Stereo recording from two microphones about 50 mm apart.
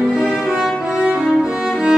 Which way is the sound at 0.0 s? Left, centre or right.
Centre.